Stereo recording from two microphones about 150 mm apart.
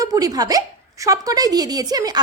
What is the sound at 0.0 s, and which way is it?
A woman's voice, 25° right (ahead or behind).